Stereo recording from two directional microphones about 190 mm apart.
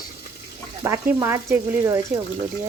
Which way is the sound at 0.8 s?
15° right (ahead or behind).